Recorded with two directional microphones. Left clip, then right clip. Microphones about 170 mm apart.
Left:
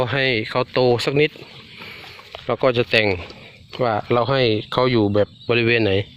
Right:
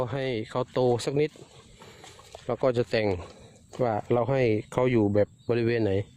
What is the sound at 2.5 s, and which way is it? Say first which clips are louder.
Speech: left 8 dB; 25° right (ahead or behind).